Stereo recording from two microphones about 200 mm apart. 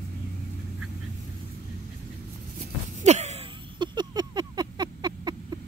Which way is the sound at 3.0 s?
35° right (ahead or behind).